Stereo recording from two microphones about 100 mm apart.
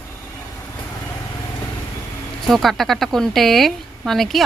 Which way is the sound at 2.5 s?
Centre (ahead or behind).